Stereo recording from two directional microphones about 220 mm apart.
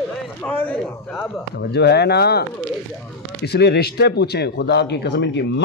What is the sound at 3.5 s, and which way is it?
A man's voice, 50° left (ahead or behind).